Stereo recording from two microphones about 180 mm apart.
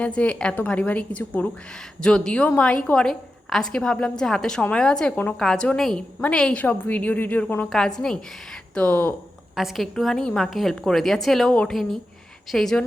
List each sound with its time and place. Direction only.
0.0 s a woman's voice: 5° left (ahead or behind)